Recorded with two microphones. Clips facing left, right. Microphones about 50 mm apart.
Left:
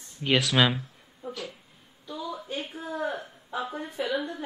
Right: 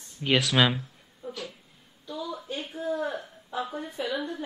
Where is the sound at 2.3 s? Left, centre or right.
Centre.